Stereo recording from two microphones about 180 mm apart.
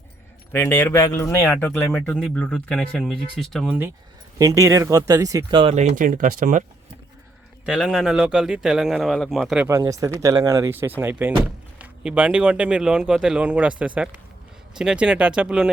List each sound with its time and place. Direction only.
0.5 s speech: 10° left (ahead or behind)
4.4 s speech: 20° right (ahead or behind)
5.9 s speech: 50° right (ahead or behind)
7.6 s speech: 5° right (ahead or behind)
9.6 s speech: 15° right (ahead or behind)